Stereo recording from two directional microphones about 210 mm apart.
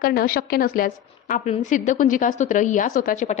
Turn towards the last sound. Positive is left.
turn(degrees=35)  # may be behind; listen again after turning